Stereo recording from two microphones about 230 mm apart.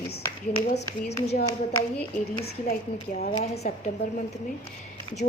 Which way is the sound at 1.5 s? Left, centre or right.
Centre.